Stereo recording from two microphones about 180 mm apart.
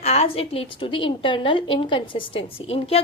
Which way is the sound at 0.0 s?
35° left (ahead or behind).